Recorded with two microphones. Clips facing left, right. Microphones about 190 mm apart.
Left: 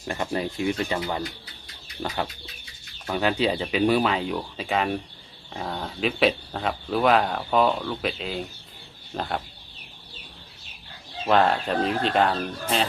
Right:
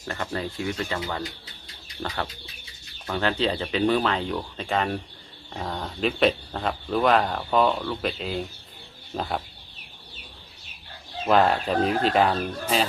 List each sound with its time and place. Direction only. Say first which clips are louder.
0.1 s speech: left 3 dB; 20° left (ahead or behind); by 9.4 s centre (ahead or behind)
11.3 s speech: even; centre (ahead or behind)